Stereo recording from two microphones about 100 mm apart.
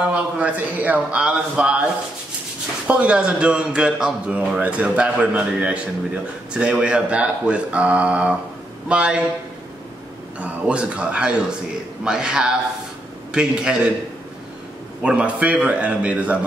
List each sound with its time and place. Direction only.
0.1 s a man's voice: 15° right (ahead or behind)
2.9 s a man's voice: 10° right (ahead or behind)
10.4 s a man's voice: 10° right (ahead or behind)
15.0 s a man's voice: 10° right (ahead or behind)